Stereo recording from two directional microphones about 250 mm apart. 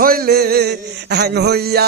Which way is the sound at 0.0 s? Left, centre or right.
Right.